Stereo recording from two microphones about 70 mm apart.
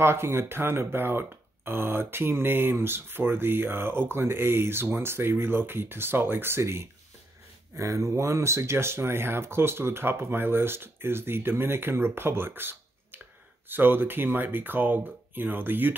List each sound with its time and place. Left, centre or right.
0.0 s speech: right